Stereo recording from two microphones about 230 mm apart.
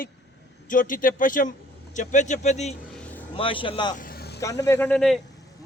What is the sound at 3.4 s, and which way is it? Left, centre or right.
Speech, left.